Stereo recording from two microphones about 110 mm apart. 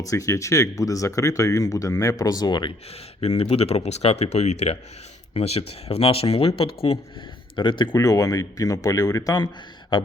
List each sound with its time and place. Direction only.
0.1 s speech: 30° left (ahead or behind)
3.2 s speech: 60° left (ahead or behind)
7.5 s speech: 50° left (ahead or behind)
7.9 s speech: 30° left (ahead or behind)